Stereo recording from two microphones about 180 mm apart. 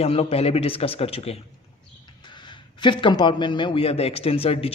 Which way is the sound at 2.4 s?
25° left (ahead or behind).